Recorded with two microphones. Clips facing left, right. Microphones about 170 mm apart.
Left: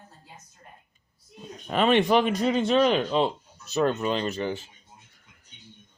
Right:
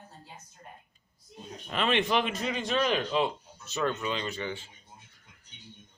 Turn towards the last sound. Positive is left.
turn(degrees=45)  # may be behind; listen again after turning